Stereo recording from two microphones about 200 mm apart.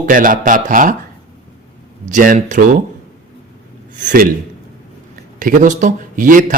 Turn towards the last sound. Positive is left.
turn(degrees=-45)  # may be behind; listen again after turning